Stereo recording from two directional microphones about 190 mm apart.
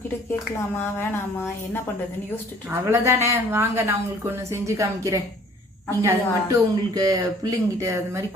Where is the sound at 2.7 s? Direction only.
15° right (ahead or behind).